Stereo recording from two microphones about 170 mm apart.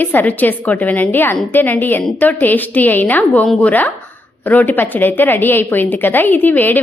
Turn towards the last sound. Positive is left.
turn(degrees=10)  # may be behind; listen again after turning